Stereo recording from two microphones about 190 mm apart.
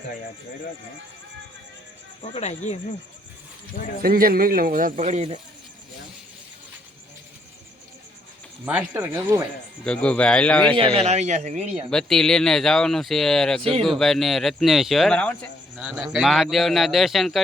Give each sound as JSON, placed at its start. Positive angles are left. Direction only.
{"t": 2.2, "sound": "speech", "side_deg": 35}
{"t": 4.0, "sound": "a man's voice", "side_deg": -50}
{"t": 8.6, "sound": "speech", "side_deg": -10}
{"t": 9.8, "sound": "speech", "side_deg": 5}
{"t": 10.8, "sound": "a man's voice", "side_deg": -30}
{"t": 11.9, "sound": "speech", "side_deg": 0}
{"t": 13.6, "sound": "a man's voice", "side_deg": -30}
{"t": 13.8, "sound": "speech", "side_deg": 0}
{"t": 15.7, "sound": "speech", "side_deg": -5}